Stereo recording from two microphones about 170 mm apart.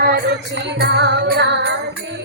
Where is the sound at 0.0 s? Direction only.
65° right (ahead or behind); by 1.7 s 90° right.